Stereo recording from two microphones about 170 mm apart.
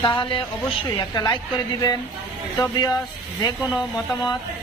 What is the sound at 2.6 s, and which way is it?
Speech, 25° left (ahead or behind).